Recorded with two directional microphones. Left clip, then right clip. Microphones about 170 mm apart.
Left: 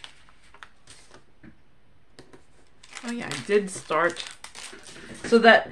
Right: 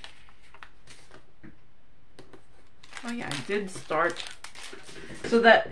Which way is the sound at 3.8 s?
45° left (ahead or behind).